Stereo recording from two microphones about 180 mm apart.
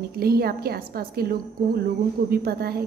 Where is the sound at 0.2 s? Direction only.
55° right (ahead or behind).